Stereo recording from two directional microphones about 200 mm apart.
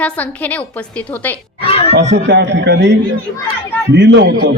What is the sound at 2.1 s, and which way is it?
A man's voice, 60° right (ahead or behind).